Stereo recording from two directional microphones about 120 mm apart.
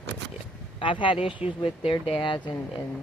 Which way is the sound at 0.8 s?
45° left (ahead or behind).